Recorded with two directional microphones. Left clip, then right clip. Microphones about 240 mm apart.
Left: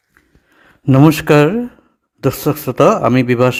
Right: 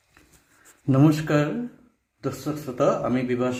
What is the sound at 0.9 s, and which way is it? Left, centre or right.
A man's voice, left.